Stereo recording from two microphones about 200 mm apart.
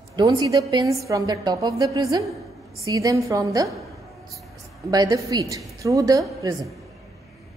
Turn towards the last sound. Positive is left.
turn(degrees=-15)  # may be behind; listen again after turning